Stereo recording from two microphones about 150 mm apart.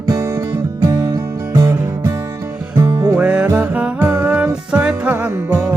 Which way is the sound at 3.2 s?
10° right (ahead or behind).